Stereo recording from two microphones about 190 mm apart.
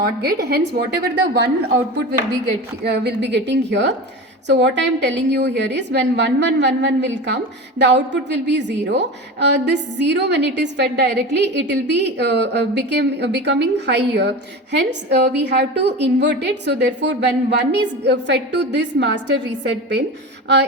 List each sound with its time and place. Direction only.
0.0 s a woman's voice: 55° right (ahead or behind)
2.8 s a woman's voice: 60° right (ahead or behind)